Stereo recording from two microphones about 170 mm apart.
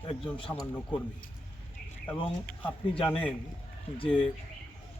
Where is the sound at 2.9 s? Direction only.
35° left (ahead or behind).